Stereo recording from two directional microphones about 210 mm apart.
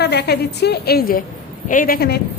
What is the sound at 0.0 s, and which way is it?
A woman's voice, 50° left (ahead or behind).